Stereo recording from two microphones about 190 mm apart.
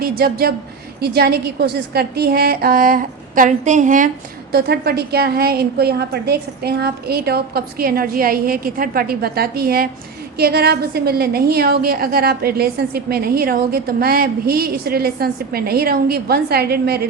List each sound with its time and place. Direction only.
0.0 s a woman's voice: 55° right (ahead or behind)
4.5 s a woman's voice: 55° right (ahead or behind)